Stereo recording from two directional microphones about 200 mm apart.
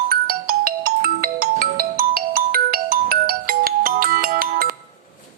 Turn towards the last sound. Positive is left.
turn(degrees=-45)  # may be behind; listen again after turning